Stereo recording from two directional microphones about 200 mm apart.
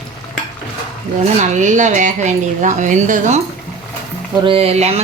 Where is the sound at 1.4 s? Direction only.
40° right (ahead or behind).